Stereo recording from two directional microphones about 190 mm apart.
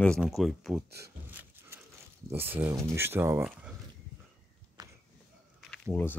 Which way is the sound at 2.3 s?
10° right (ahead or behind).